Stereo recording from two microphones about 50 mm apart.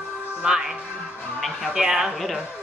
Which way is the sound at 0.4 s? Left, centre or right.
Centre.